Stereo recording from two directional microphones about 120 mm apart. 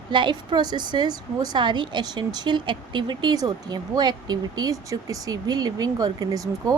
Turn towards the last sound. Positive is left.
turn(degrees=-30)  # may be behind; listen again after turning